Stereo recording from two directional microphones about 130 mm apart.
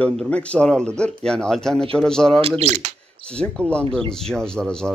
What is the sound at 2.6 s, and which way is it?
Speech, 65° right (ahead or behind).